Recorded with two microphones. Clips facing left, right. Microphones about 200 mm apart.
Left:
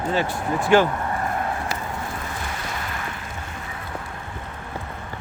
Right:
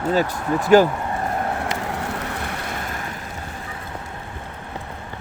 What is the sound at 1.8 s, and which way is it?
Vehicle, 75° right (ahead or behind).